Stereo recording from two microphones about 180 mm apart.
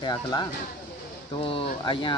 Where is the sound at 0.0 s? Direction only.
20° left (ahead or behind).